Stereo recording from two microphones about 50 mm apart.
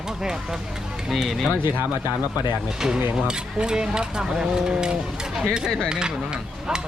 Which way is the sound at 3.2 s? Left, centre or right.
Centre.